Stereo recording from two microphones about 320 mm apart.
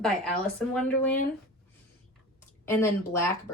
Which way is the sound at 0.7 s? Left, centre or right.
Centre.